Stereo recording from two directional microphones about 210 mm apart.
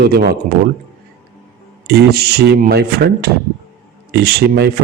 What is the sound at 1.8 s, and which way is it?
A man's voice, 50° right (ahead or behind).